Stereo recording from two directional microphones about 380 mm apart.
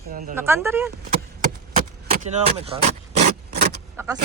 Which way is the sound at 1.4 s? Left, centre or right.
Centre.